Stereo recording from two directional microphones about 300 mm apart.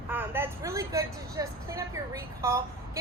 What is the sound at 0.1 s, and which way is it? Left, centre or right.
A woman's voice, centre.